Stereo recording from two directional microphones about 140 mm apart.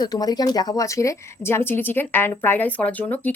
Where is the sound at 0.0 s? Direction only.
30° left (ahead or behind).